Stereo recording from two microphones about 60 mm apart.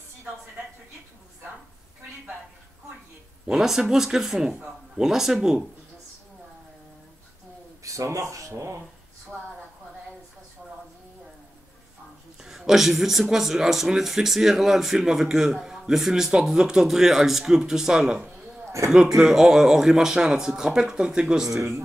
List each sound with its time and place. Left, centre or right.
3.4 s speech: centre
7.8 s speech: right
9.3 s speech: right
10.6 s a sound: centre
12.4 s speech: centre